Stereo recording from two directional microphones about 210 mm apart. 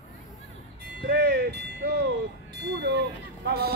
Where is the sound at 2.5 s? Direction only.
55° right (ahead or behind).